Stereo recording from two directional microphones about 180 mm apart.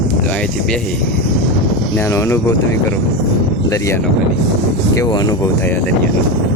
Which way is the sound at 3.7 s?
15° left (ahead or behind).